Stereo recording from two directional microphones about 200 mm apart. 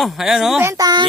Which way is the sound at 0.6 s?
20° right (ahead or behind).